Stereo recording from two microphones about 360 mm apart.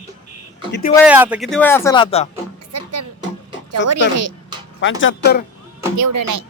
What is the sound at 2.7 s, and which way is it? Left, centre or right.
Music, right.